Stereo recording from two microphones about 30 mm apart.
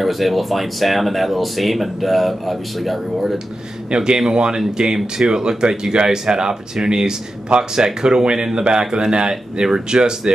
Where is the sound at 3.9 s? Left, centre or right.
Right.